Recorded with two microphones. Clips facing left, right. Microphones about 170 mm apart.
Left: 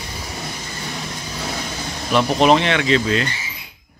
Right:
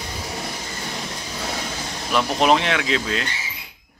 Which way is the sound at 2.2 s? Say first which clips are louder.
Left 3 dB; centre (ahead or behind).